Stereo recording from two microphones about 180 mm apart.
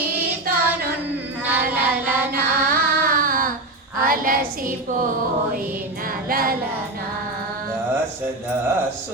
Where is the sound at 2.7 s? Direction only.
55° right (ahead or behind).